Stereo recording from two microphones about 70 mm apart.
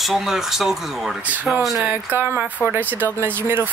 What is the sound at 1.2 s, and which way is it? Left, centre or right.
Speech, right.